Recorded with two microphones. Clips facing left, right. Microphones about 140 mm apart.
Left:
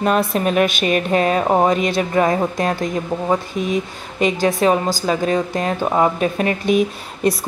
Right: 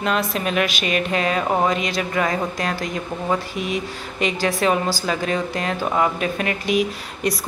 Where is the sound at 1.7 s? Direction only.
50° left (ahead or behind).